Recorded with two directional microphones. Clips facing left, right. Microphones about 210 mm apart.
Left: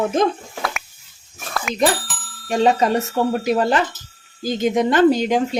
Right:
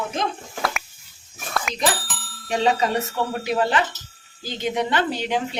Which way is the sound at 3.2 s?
40° left (ahead or behind).